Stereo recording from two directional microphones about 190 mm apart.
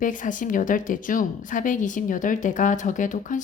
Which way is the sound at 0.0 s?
45° left (ahead or behind).